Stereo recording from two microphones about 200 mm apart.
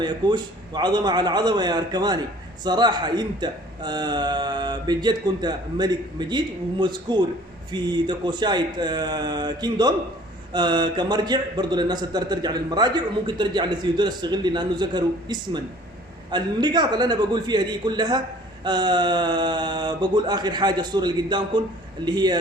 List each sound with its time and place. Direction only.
0.0 s a man's voice: 20° right (ahead or behind)